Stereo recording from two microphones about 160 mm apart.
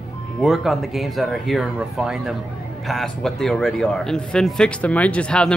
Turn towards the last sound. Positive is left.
turn(degrees=5)  # may be behind; listen again after turning